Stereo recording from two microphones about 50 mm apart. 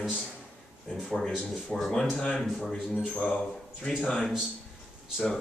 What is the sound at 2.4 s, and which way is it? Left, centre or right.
Speech, centre.